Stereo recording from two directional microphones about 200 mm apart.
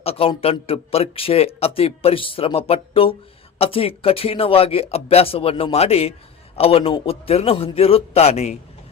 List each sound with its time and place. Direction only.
0.0 s speech: 30° left (ahead or behind)